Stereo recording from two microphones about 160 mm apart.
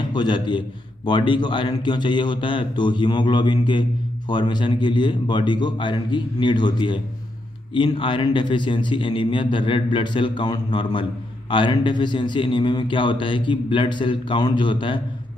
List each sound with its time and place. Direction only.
0.0 s a man's voice: 25° left (ahead or behind)